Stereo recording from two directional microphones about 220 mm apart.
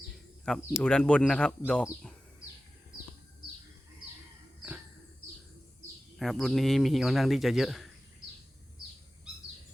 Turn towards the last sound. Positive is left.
turn(degrees=0)  # may be behind; listen again after turning